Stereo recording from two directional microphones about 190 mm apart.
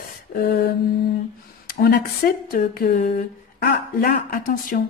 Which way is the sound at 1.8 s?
55° left (ahead or behind).